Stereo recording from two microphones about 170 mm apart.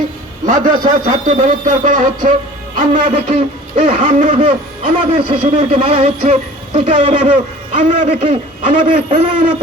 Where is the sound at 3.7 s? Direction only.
35° right (ahead or behind).